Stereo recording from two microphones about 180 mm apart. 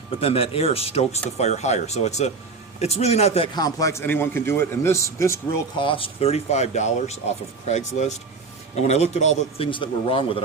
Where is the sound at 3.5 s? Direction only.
20° left (ahead or behind).